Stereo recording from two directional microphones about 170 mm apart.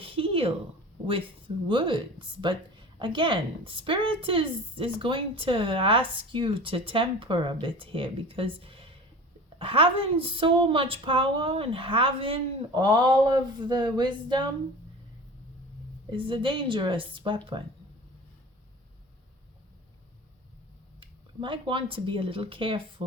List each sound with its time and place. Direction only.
0.0 s a sound: 35° right (ahead or behind)
1.0 s speech: 30° right (ahead or behind)
16.1 s speech: 30° right (ahead or behind)
21.0 s speech: 30° right (ahead or behind)